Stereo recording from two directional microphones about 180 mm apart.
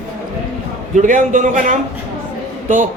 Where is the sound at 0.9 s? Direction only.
45° right (ahead or behind).